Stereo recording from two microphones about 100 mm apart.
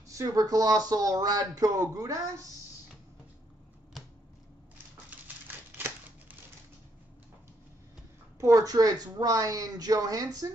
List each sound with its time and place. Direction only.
0.1 s speech: 35° right (ahead or behind)
5.1 s typewriter: 15° right (ahead or behind)
5.8 s scissors: 20° right (ahead or behind)
8.4 s speech: 35° right (ahead or behind)